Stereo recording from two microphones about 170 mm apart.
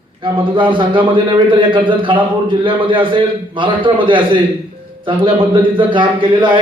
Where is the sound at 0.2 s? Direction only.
30° right (ahead or behind).